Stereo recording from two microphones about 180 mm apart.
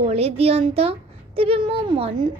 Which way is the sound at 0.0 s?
35° right (ahead or behind).